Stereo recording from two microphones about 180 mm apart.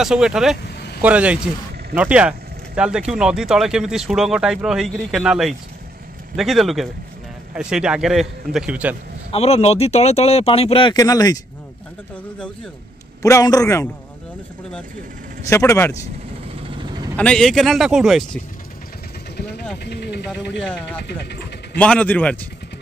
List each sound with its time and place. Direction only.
0.0 s speech: 5° right (ahead or behind)
9.3 s speech: 35° left (ahead or behind); by 11.3 s 20° left (ahead or behind)
13.2 s a man's voice: 20° left (ahead or behind)
15.5 s a man's voice: 15° left (ahead or behind)
17.2 s speech: 5° left (ahead or behind)
19.3 s vehicle: 65° left (ahead or behind)
19.8 s speech: 65° left (ahead or behind)
20.6 s speech: 5° left (ahead or behind)
21.1 s speech: 70° left (ahead or behind)
21.7 s a man's voice: 5° left (ahead or behind)